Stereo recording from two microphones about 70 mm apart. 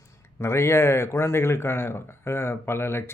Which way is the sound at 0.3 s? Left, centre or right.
Left.